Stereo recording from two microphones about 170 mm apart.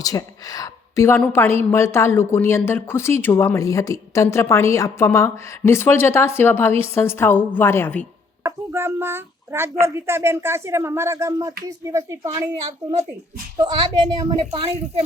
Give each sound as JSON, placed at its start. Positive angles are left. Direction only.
{"t": 0.0, "sound": "a woman's voice", "side_deg": 20}
{"t": 8.4, "sound": "a child's voice", "side_deg": -15}
{"t": 13.6, "sound": "a child's voice", "side_deg": -25}